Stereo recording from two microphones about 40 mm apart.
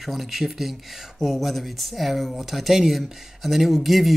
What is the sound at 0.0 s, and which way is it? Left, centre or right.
Speech, centre.